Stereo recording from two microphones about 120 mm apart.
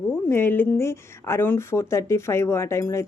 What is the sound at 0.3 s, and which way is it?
Speech, 20° left (ahead or behind).